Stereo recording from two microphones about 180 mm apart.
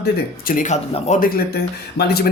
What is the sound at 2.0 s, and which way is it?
Speech, 65° left (ahead or behind).